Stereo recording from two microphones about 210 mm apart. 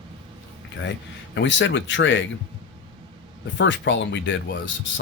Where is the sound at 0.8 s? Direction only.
60° left (ahead or behind).